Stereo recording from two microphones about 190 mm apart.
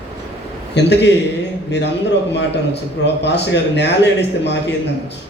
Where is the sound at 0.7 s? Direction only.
65° left (ahead or behind).